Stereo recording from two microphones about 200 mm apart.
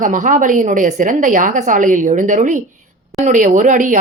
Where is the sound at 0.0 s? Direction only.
40° right (ahead or behind).